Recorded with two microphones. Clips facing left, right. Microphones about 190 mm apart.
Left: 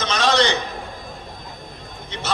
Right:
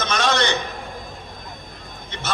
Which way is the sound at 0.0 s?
50° right (ahead or behind).